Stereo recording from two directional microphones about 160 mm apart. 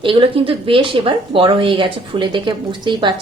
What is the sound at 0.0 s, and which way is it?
A woman's voice, 35° right (ahead or behind).